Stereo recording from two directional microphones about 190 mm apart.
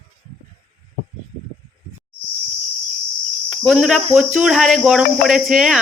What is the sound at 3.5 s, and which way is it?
Cricket, centre (ahead or behind).